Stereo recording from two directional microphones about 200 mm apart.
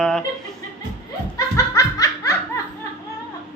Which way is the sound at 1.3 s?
15° left (ahead or behind).